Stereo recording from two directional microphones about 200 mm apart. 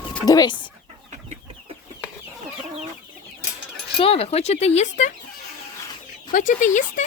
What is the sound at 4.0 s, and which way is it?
Speech, 30° left (ahead or behind).